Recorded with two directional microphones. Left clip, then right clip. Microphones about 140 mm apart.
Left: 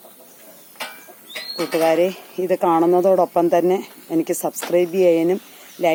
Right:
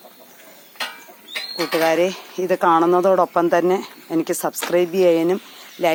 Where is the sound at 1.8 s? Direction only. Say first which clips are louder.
Left 1 dB; centre (ahead or behind).